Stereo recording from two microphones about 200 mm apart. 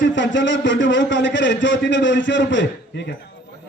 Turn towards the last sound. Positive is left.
turn(degrees=60)  # may be behind; listen again after turning